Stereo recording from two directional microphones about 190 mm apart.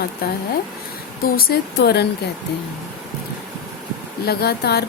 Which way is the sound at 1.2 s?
55° left (ahead or behind).